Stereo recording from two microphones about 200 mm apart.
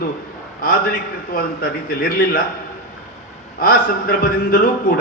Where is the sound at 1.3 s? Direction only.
50° left (ahead or behind).